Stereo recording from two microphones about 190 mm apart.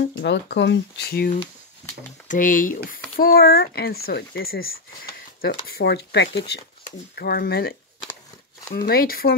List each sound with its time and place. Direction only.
0.2 s speech: 65° left (ahead or behind)
2.2 s speech: 45° left (ahead or behind)
8.7 s speech: 50° left (ahead or behind)